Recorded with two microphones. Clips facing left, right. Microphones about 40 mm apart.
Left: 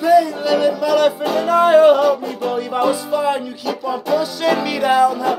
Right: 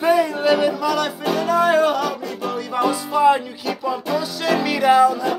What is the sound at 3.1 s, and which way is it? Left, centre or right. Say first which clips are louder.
Music: right 3 dB; centre.